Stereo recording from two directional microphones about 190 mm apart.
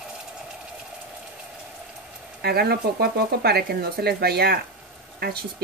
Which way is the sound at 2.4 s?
55° right (ahead or behind).